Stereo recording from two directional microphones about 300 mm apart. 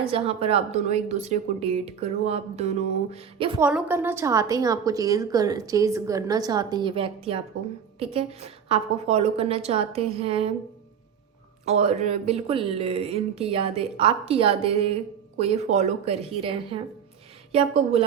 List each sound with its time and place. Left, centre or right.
0.1 s speech: centre
3.6 s a woman's voice: centre
11.6 s speech: right